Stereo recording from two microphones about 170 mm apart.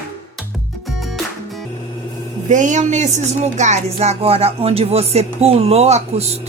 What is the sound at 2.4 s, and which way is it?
Speech, 45° right (ahead or behind).